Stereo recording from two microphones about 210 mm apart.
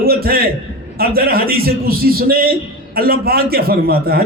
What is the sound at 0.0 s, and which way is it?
A man's voice, 45° right (ahead or behind).